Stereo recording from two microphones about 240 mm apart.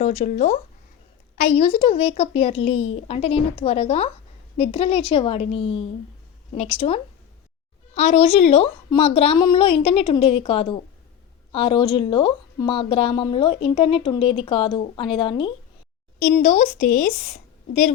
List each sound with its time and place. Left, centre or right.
0.0 s a woman's voice: left